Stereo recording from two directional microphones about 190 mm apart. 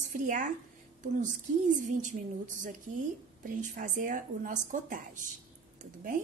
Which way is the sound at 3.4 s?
45° right (ahead or behind).